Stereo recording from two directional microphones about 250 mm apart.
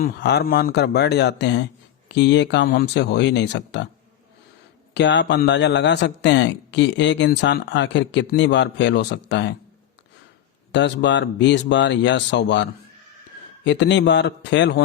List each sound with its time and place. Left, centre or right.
0.0 s speech: left
4.9 s speech: left
10.7 s speech: left
13.7 s speech: left